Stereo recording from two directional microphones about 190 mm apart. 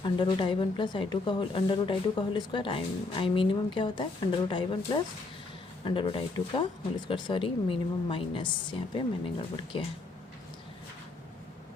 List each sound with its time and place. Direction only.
0.0 s speech: 25° left (ahead or behind)